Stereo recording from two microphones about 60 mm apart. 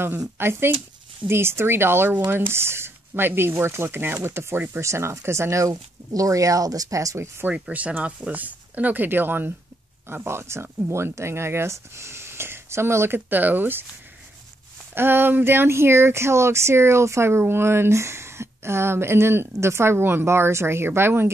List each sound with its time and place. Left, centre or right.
0.4 s speech: right
7.7 s speech: right
13.3 s speech: right
15.0 s speech: right